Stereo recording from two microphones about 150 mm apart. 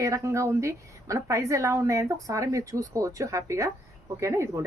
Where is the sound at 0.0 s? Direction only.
20° right (ahead or behind).